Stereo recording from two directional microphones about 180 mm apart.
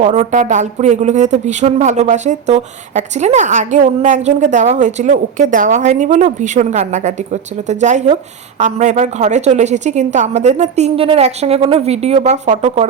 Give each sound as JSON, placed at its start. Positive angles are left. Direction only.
{"t": 0.0, "sound": "speech", "side_deg": -40}